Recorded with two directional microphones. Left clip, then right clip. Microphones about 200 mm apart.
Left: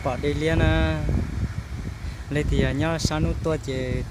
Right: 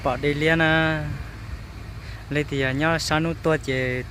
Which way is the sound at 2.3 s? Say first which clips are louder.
Right 2 dB; centre (ahead or behind).